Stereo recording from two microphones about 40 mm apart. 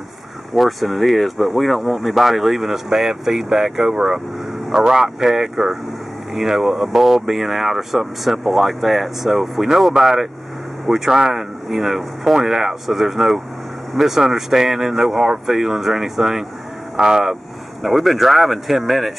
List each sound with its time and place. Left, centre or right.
0.5 s speech: centre
17.8 s speech: centre